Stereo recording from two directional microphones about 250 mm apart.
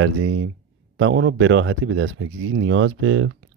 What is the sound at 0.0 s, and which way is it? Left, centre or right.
Speech, right.